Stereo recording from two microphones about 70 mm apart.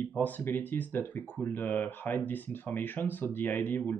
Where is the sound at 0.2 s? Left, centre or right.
Left.